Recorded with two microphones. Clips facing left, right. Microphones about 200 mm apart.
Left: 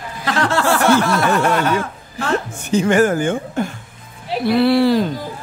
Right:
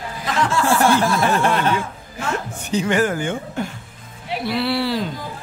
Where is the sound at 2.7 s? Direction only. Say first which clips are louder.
Left 5 dB; 45° left (ahead or behind).